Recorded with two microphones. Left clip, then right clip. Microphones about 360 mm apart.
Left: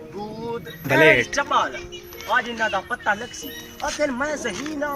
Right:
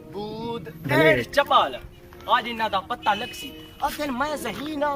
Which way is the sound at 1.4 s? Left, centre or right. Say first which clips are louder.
Right 2 dB; centre.